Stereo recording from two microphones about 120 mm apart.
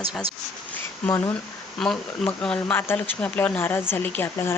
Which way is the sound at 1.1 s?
20° left (ahead or behind).